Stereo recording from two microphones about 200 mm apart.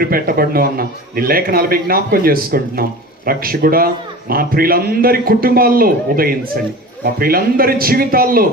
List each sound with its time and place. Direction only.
0.0 s a man's voice: 45° right (ahead or behind)